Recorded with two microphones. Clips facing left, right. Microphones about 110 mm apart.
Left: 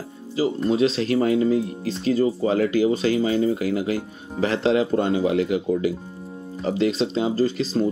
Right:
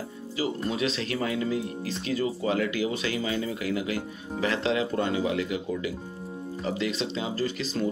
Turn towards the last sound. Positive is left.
turn(degrees=35)  # may be behind; listen again after turning